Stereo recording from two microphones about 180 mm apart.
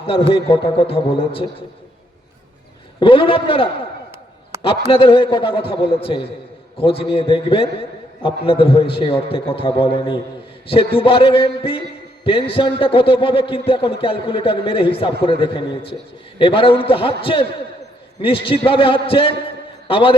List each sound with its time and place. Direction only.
0.0 s a man's voice: 30° left (ahead or behind)
3.0 s a man's voice: 30° left (ahead or behind)
4.5 s a sound: 15° right (ahead or behind)
4.9 s a man's voice: 30° left (ahead or behind)